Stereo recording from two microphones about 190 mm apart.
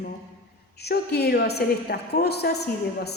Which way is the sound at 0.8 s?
60° left (ahead or behind).